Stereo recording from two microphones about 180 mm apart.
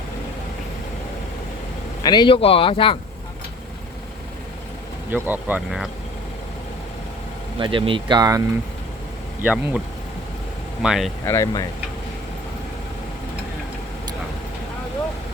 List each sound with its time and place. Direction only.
2.0 s speech: 25° left (ahead or behind)
5.1 s speech: 10° right (ahead or behind)
7.6 s speech: 30° right (ahead or behind)
9.4 s speech: 10° right (ahead or behind)
10.8 s speech: centre (ahead or behind)
11.3 s speech: 20° left (ahead or behind)